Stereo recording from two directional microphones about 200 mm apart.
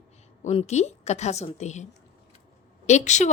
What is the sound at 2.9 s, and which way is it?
Speech, 35° left (ahead or behind).